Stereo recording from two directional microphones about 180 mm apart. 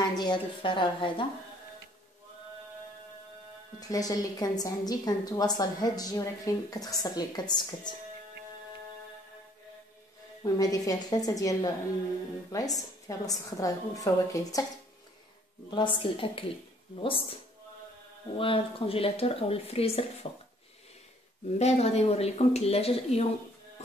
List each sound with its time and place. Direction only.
0.0 s a woman's voice: 25° left (ahead or behind)
3.8 s a woman's voice: 20° left (ahead or behind)
10.4 s a woman's voice: 20° left (ahead or behind)
15.7 s a woman's voice: 30° left (ahead or behind)
18.4 s speech: 30° left (ahead or behind)
21.5 s speech: 35° left (ahead or behind)